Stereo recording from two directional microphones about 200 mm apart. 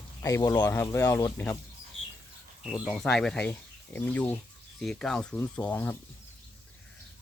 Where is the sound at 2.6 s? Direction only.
5° right (ahead or behind).